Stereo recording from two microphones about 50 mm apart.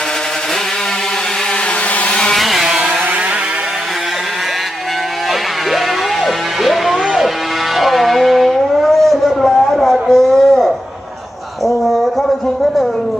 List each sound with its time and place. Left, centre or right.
2.0 s vehicle: centre
2.3 s vehicle: centre
6.2 s music: centre
7.8 s a sound: centre